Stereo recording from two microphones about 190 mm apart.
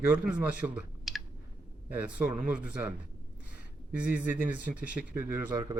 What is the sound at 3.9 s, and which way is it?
Speech, 10° right (ahead or behind).